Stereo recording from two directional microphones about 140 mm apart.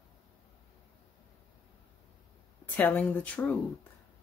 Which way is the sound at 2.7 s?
10° left (ahead or behind).